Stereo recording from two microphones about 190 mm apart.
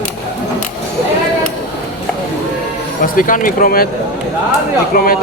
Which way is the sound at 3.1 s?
45° left (ahead or behind).